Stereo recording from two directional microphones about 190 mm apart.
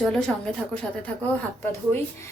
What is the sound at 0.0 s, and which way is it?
A woman's voice, 5° left (ahead or behind).